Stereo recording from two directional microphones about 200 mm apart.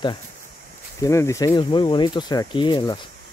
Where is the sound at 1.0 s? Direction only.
15° left (ahead or behind).